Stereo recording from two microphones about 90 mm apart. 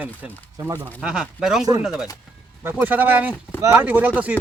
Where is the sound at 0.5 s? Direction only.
35° right (ahead or behind).